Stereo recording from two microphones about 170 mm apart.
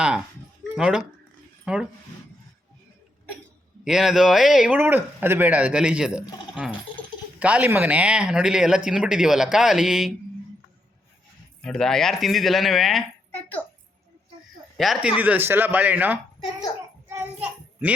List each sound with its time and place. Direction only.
0.6 s a sound: 5° right (ahead or behind)
1.6 s speech: 5° right (ahead or behind)
3.8 s speech: 5° right (ahead or behind)
7.3 s speech: 10° right (ahead or behind)
11.6 s speech: 5° left (ahead or behind)
13.3 s a child's voice: 15° left (ahead or behind)
14.8 s speech: centre (ahead or behind)
15.2 s a man's voice: 10° right (ahead or behind)
17.1 s a sound: 10° right (ahead or behind)